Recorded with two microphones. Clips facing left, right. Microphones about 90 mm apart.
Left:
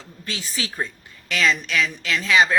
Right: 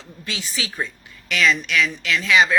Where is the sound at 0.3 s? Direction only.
40° left (ahead or behind).